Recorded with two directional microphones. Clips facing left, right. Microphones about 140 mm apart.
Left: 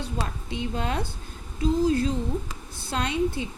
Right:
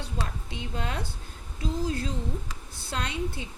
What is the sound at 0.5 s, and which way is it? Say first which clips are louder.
A woman's voice: left 6 dB; 25° left (ahead or behind).